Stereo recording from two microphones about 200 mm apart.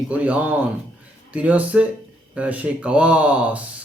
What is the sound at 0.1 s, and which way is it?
Mantra, 5° right (ahead or behind).